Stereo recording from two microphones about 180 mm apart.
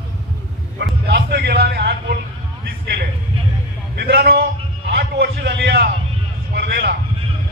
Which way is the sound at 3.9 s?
65° right (ahead or behind).